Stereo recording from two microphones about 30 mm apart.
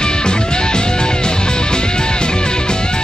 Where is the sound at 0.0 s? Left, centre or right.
Left.